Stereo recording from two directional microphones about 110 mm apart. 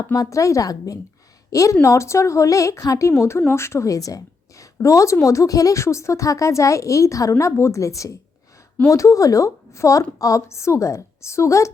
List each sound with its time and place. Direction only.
0.0 s a woman's voice: 35° left (ahead or behind)